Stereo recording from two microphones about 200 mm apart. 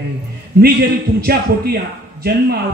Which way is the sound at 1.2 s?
50° right (ahead or behind).